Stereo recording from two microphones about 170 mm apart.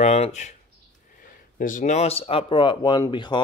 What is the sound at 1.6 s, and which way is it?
Speech, 50° left (ahead or behind).